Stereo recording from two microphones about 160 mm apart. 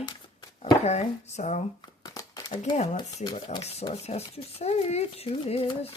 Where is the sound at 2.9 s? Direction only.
30° left (ahead or behind).